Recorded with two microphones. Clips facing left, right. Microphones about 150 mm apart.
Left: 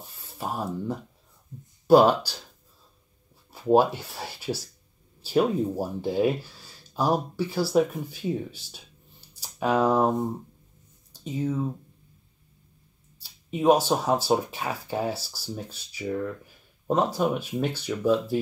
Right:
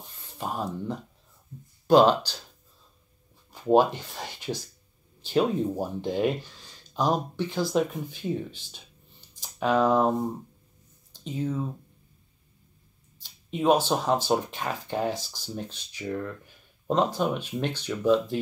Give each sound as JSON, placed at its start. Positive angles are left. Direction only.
{"t": 0.0, "sound": "a sound", "side_deg": 10}
{"t": 1.9, "sound": "speech", "side_deg": 10}
{"t": 3.5, "sound": "speech", "side_deg": 10}
{"t": 11.1, "sound": "speech", "side_deg": 10}
{"t": 13.2, "sound": "speech", "side_deg": 10}